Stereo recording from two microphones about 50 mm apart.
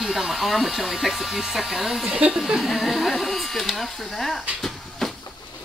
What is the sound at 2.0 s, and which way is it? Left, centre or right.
Speech, right.